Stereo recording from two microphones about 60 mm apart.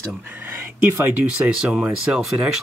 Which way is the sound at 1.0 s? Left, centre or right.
Right.